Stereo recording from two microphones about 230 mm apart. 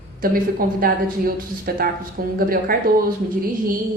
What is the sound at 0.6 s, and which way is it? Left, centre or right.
Speech, right.